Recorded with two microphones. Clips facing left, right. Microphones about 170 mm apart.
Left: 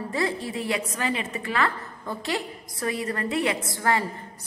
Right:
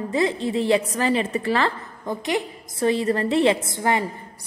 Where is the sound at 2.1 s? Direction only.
20° right (ahead or behind).